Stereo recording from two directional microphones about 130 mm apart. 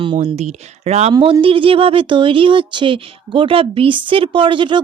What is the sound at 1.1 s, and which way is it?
Speech, 40° right (ahead or behind).